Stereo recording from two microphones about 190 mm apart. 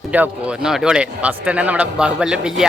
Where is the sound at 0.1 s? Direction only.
5° right (ahead or behind).